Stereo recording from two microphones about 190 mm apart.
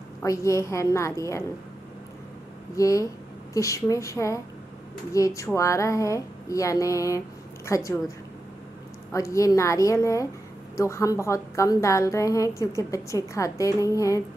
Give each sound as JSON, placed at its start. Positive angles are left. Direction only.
{"t": 0.2, "sound": "a woman's voice", "side_deg": 15}
{"t": 2.7, "sound": "a woman's voice", "side_deg": 15}
{"t": 9.1, "sound": "a woman's voice", "side_deg": 15}